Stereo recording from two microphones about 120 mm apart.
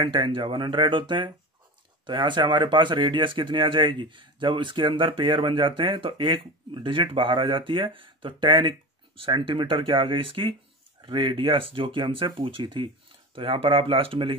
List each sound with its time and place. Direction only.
0.0 s speech: 45° right (ahead or behind)